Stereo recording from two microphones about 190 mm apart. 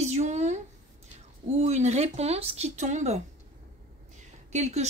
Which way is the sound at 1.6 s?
35° right (ahead or behind).